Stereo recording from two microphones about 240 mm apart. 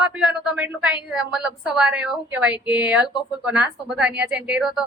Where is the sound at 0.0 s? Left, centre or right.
Centre.